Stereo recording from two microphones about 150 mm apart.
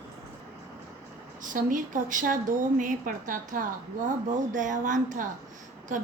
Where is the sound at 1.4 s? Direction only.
60° right (ahead or behind).